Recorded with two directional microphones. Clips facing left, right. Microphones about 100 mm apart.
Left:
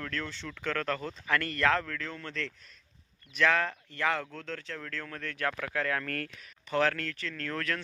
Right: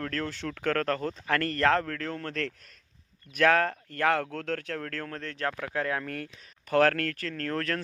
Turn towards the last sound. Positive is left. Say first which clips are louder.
# right 4 dB
turn(degrees=-35)  # may be behind; listen again after turning